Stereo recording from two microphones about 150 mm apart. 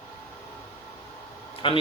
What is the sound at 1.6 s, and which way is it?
Speech, 35° left (ahead or behind).